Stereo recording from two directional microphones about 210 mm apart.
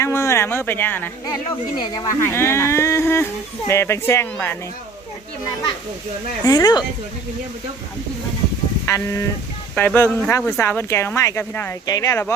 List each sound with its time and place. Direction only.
0.0 s speech: 15° left (ahead or behind)
1.8 s speech: 20° left (ahead or behind)
6.4 s speech: 15° left (ahead or behind)
8.9 s speech: 15° left (ahead or behind)